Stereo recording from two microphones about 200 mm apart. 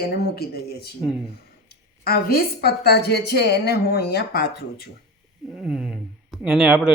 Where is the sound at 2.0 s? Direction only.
50° left (ahead or behind).